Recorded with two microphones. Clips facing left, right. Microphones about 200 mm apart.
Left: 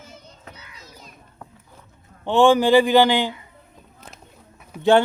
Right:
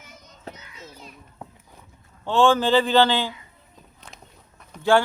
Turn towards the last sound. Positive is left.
turn(degrees=20)  # may be behind; listen again after turning